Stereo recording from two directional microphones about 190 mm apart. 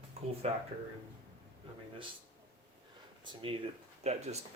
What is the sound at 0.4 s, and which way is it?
Speech, 35° right (ahead or behind).